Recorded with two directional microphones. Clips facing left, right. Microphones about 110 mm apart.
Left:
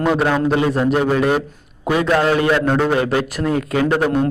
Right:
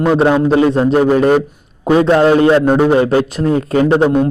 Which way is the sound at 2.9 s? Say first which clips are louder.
Right 6 dB; 30° right (ahead or behind).